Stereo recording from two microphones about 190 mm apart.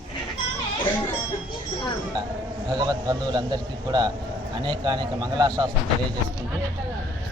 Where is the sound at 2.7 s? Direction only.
20° right (ahead or behind).